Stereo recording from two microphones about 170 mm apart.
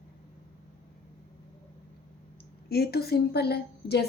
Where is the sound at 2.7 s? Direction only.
65° left (ahead or behind).